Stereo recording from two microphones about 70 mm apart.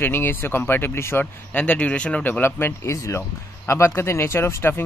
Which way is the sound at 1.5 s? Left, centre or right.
Left.